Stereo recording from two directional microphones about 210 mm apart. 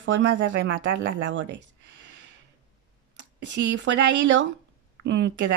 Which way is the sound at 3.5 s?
60° right (ahead or behind).